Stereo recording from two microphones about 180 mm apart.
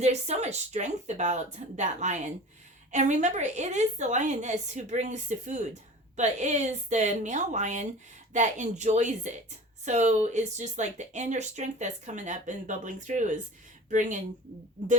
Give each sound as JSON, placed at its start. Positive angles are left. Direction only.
{"t": 0.0, "sound": "speech", "side_deg": -40}